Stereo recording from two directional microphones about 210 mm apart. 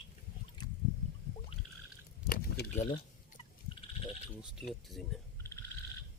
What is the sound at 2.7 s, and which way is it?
Speech, 35° left (ahead or behind).